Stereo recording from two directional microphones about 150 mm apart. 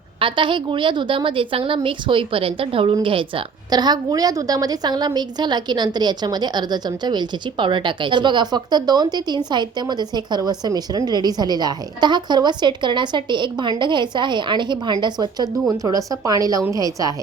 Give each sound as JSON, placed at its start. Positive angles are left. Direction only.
{"t": 0.2, "sound": "a woman's voice", "side_deg": -35}